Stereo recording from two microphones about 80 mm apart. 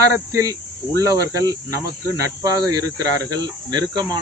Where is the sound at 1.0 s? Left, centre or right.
Right.